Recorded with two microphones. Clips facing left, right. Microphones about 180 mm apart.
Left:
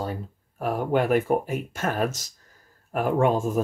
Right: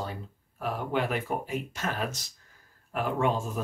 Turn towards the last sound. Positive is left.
turn(degrees=50)  # may be behind; listen again after turning